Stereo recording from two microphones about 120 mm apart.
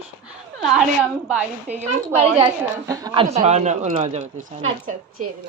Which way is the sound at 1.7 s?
65° right (ahead or behind).